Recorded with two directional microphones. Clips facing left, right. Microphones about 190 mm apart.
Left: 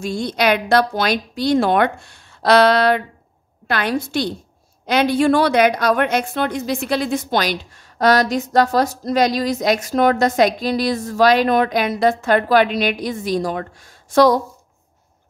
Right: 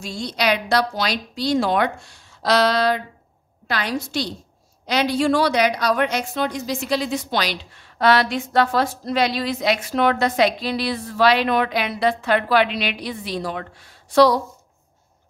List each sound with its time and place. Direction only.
0.0 s a woman's voice: 55° left (ahead or behind)